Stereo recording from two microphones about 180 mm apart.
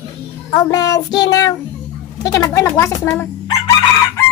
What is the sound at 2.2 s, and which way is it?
Speech, 20° left (ahead or behind).